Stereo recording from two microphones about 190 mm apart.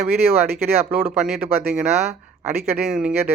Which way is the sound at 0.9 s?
5° right (ahead or behind).